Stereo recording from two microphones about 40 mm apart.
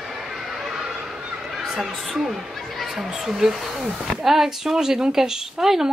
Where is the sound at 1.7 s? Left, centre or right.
Centre.